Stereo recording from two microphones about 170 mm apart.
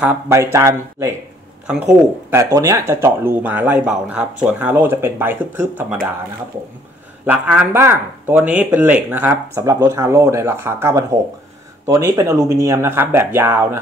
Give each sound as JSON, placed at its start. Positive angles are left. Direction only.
{"t": 0.0, "sound": "speech", "side_deg": -10}
{"t": 1.7, "sound": "speech", "side_deg": -5}
{"t": 2.3, "sound": "speech", "side_deg": -15}
{"t": 7.2, "sound": "speech", "side_deg": -10}